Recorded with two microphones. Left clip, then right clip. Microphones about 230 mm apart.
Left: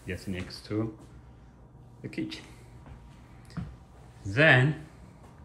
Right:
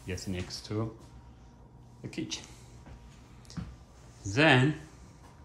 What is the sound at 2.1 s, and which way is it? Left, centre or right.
Speech, centre.